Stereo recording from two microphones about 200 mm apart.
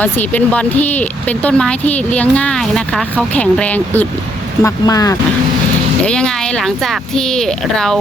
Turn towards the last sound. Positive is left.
turn(degrees=5)  # may be behind; listen again after turning